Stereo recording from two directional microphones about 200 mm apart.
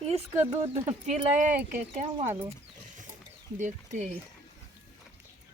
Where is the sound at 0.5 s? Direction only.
30° right (ahead or behind).